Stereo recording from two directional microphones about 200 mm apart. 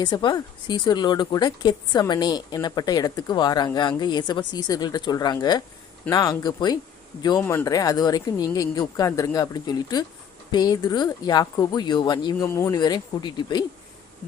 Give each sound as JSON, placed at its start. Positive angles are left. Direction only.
{"t": 0.0, "sound": "speech", "side_deg": 20}